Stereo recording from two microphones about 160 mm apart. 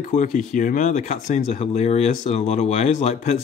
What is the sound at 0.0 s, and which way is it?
Speech, 50° left (ahead or behind).